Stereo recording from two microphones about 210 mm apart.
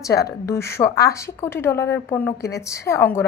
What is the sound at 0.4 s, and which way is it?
A woman's voice, 15° left (ahead or behind).